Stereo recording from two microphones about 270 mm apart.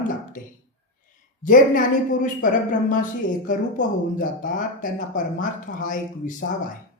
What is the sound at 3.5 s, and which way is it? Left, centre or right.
Speech, left.